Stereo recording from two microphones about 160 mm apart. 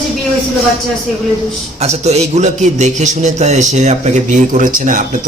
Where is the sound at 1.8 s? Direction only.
40° right (ahead or behind).